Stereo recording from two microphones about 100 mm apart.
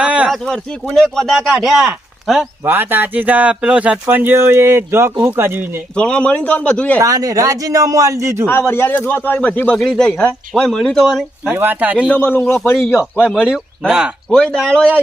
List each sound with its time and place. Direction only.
0.0 s a sound: 15° right (ahead or behind)
0.3 s speech: 5° left (ahead or behind)
2.6 s speech: 20° right (ahead or behind)
6.0 s a man's voice: 10° left (ahead or behind)
7.0 s a man's voice: 35° right (ahead or behind)
8.4 s speech: 25° left (ahead or behind)
9.7 s speech: centre (ahead or behind)
11.5 s speech: 20° right (ahead or behind)
12.0 s speech: 20° left (ahead or behind)
13.1 s a man's voice: 15° left (ahead or behind)
13.8 s speech: 5° right (ahead or behind)
14.3 s a man's voice: 5° left (ahead or behind)